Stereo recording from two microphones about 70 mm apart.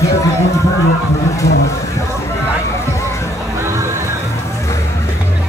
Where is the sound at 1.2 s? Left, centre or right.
Left.